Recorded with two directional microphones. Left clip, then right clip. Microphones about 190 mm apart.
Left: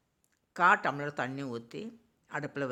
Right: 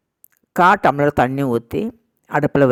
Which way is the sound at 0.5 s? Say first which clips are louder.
Right 13 dB; 55° right (ahead or behind).